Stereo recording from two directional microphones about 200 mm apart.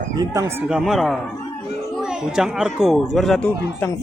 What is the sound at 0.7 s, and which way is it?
Speech, centre (ahead or behind).